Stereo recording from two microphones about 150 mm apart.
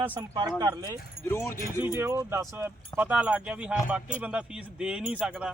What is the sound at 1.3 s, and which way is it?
Speech, 15° left (ahead or behind).